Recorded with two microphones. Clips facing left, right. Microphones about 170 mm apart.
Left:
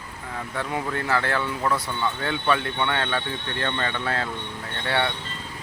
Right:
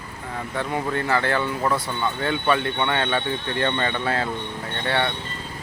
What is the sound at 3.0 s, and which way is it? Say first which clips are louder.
Speech: right 4 dB; 20° right (ahead or behind).